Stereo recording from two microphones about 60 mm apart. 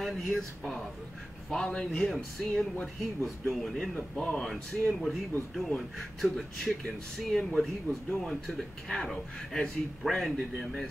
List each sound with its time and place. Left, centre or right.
0.0 s speech: centre